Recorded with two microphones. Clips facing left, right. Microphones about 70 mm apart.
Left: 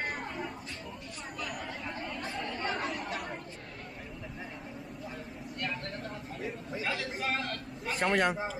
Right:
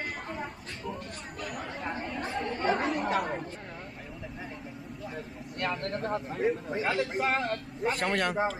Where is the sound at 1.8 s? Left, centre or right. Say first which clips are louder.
Right 4 dB; right.